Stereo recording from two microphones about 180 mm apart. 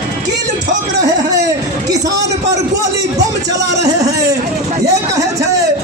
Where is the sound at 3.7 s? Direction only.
20° right (ahead or behind).